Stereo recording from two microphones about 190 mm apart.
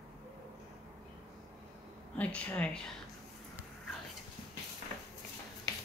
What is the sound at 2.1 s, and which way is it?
Speech, 5° left (ahead or behind).